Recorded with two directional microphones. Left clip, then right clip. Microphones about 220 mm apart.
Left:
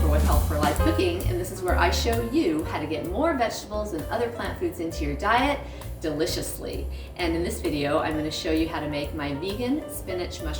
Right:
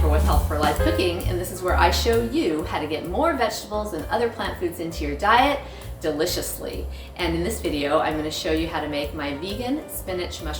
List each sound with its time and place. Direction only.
0.1 s music: centre (ahead or behind)
1.6 s a woman's voice: centre (ahead or behind)